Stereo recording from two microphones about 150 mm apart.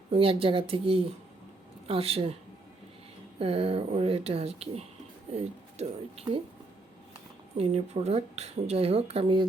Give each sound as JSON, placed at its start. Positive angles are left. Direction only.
{"t": 0.1, "sound": "speech", "side_deg": -40}
{"t": 3.3, "sound": "speech", "side_deg": -40}
{"t": 7.5, "sound": "speech", "side_deg": -40}